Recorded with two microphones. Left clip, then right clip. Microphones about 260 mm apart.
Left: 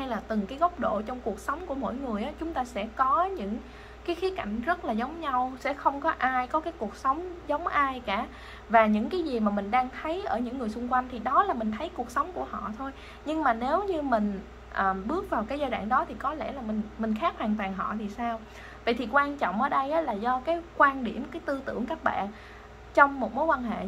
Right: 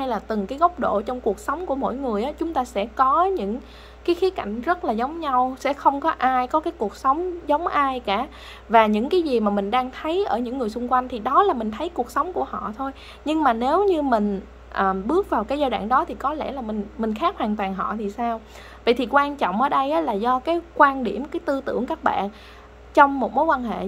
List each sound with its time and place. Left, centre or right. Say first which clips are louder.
0.0 s a woman's voice: right 7 dB; right
23.3 s a woman's voice: right 6 dB; right